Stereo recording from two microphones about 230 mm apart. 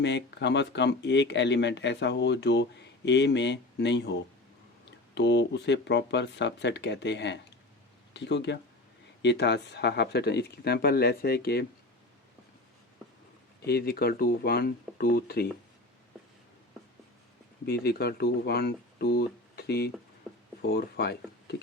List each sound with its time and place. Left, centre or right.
0.0 s speech: left
5.1 s speech: left
13.7 s speech: left
17.7 s speech: left